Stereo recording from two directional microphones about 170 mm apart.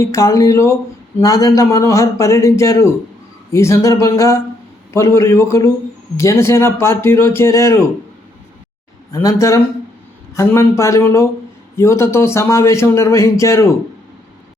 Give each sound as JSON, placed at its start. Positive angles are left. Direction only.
{"t": 0.0, "sound": "a man's voice", "side_deg": 20}
{"t": 9.1, "sound": "a man's voice", "side_deg": 20}